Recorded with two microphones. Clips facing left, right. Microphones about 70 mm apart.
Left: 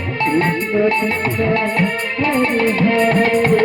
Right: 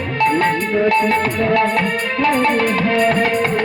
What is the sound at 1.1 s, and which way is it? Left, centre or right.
Music, left.